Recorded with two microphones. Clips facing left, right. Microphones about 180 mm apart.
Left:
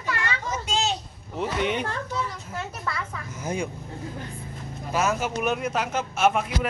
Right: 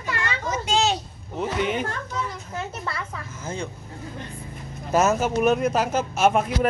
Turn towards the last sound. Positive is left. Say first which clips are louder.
# right 3 dB
turn(degrees=-40)  # may be behind; listen again after turning